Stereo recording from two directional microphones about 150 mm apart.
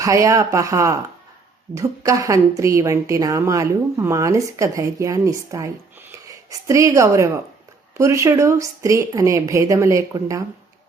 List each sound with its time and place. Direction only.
0.0 s a woman's voice: 20° right (ahead or behind)